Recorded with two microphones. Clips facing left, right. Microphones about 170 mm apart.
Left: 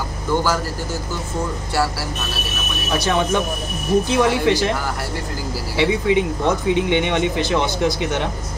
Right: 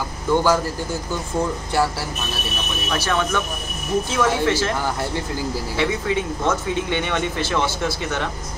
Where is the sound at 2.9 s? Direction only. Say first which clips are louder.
Left 4 dB; 20° left (ahead or behind).